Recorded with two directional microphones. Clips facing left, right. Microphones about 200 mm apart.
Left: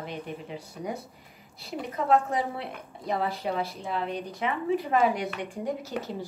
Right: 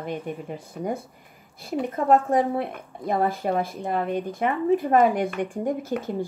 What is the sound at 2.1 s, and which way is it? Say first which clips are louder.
Speech: right 5 dB; 50° right (ahead or behind).